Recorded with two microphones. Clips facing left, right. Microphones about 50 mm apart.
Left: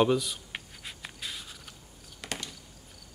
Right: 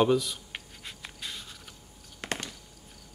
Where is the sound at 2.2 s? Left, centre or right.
Right.